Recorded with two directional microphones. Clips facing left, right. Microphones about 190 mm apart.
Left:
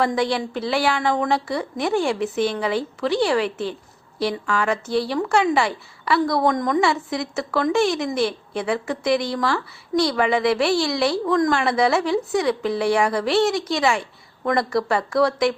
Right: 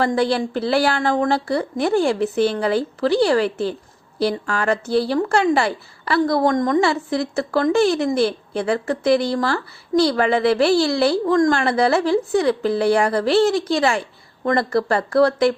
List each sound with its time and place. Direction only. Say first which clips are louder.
0.2 s a woman's voice: right 3 dB; 35° right (ahead or behind)
6.5 s a woman's voice: right 3 dB; 45° right (ahead or behind)
6.8 s a woman's voice: right 2 dB; 30° right (ahead or behind)